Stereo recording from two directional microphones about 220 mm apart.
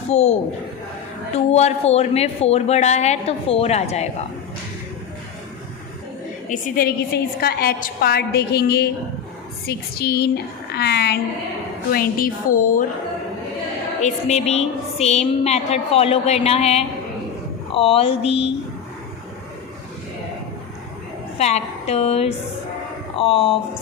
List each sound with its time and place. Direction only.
0.1 s a woman's voice: 30° left (ahead or behind)
1.5 s a woman's voice: 30° left (ahead or behind)
6.5 s a woman's voice: 40° left (ahead or behind)
14.0 s a woman's voice: 30° left (ahead or behind)
21.3 s a woman's voice: 30° left (ahead or behind)